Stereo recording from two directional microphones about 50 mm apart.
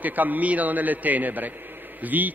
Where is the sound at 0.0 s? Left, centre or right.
Right.